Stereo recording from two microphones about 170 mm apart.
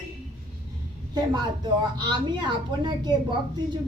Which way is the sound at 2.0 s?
25° right (ahead or behind).